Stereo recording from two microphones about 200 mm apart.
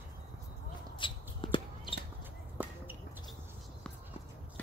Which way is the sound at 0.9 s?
25° left (ahead or behind).